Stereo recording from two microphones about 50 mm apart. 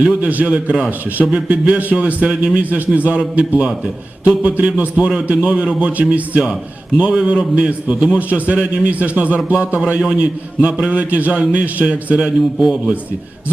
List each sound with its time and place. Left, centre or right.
0.0 s a man's voice: right
5.0 s a man's voice: right
10.8 s a man's voice: right; by 12.9 s centre